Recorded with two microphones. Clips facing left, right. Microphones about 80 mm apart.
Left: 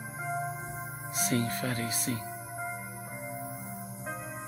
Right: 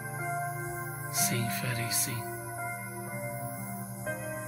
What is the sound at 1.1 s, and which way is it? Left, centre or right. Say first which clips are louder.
Speech: left 3 dB; left.